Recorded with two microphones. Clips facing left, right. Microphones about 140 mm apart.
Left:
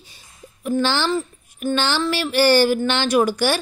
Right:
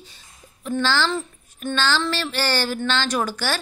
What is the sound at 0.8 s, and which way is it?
Speech, 15° left (ahead or behind).